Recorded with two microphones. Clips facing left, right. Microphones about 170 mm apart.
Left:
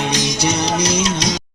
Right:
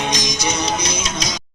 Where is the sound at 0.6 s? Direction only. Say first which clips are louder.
Left 5 dB; 70° left (ahead or behind).